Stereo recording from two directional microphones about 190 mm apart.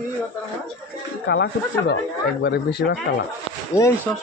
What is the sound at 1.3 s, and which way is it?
Speech, 65° left (ahead or behind).